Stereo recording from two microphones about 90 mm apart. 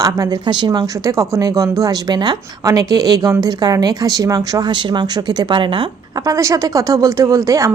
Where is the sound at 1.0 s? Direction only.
35° right (ahead or behind); by 5.9 s 65° right (ahead or behind).